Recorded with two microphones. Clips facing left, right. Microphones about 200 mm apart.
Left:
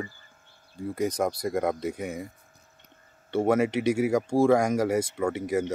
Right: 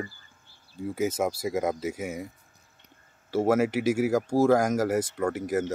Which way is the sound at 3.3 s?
5° right (ahead or behind).